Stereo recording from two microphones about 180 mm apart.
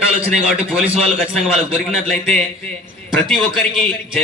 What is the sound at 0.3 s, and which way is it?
A man's voice, 5° right (ahead or behind).